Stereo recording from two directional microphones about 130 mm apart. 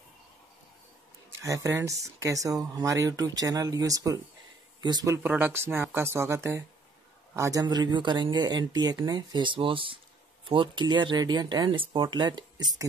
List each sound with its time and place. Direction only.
1.4 s speech: 25° right (ahead or behind)
7.6 s speech: 35° right (ahead or behind)